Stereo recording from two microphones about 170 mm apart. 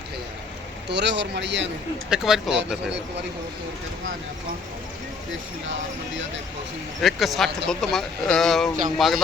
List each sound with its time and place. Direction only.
0.9 s a man's voice: 90° right
2.0 s speech: 5° right (ahead or behind)
7.0 s speech: centre (ahead or behind)